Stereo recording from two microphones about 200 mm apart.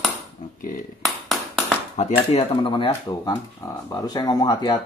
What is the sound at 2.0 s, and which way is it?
Speech, 30° left (ahead or behind).